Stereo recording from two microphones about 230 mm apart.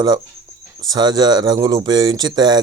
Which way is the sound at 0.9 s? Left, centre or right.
Centre.